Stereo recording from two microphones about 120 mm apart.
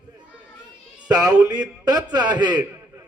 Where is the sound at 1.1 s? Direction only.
35° right (ahead or behind).